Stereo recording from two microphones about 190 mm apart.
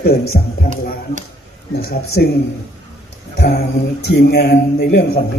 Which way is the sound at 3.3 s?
60° left (ahead or behind).